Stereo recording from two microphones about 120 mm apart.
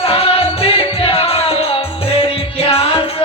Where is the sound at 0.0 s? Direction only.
55° left (ahead or behind).